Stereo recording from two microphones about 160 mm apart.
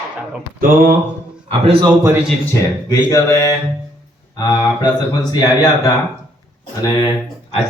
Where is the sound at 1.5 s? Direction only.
35° right (ahead or behind).